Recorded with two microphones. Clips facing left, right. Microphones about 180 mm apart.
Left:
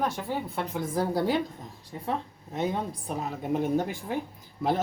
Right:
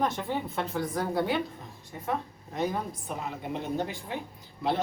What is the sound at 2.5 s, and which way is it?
Speech, 25° left (ahead or behind).